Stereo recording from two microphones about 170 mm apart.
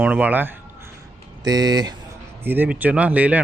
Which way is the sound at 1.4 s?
25° right (ahead or behind).